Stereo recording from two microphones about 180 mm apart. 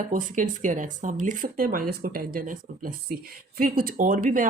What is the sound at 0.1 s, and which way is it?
Speech, 45° right (ahead or behind).